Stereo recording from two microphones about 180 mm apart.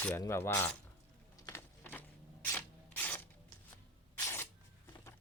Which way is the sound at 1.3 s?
15° left (ahead or behind).